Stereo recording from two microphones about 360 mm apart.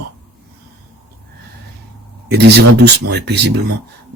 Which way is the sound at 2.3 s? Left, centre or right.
Right.